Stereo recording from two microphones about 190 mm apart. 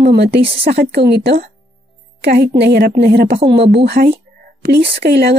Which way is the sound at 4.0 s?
50° right (ahead or behind).